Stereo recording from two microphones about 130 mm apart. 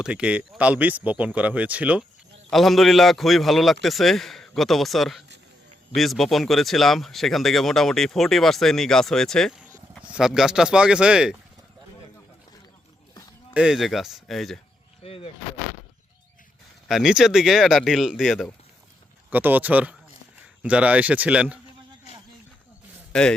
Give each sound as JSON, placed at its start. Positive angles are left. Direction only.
{"t": 0.0, "sound": "speech", "side_deg": -10}
{"t": 2.5, "sound": "speech", "side_deg": 0}
{"t": 13.5, "sound": "speech", "side_deg": -5}
{"t": 15.0, "sound": "speech", "side_deg": 45}
{"t": 16.9, "sound": "speech", "side_deg": -5}
{"t": 19.3, "sound": "speech", "side_deg": -15}
{"t": 23.1, "sound": "speech", "side_deg": 5}